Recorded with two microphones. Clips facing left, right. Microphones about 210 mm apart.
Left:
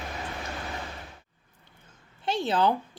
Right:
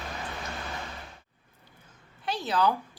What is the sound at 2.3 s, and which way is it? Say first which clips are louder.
Speech: left 2 dB; 25° left (ahead or behind).